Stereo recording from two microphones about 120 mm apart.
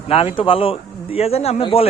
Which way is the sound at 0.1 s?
55° left (ahead or behind).